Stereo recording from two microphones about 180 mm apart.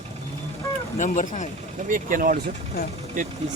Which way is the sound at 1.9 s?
50° right (ahead or behind).